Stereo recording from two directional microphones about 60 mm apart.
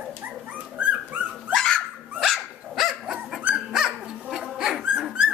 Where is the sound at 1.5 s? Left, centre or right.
Centre.